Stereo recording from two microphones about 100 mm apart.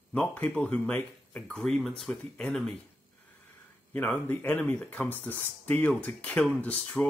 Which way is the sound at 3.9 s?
15° left (ahead or behind).